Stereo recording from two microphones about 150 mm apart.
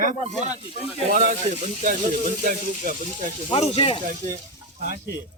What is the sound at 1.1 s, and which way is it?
Speech, 50° right (ahead or behind).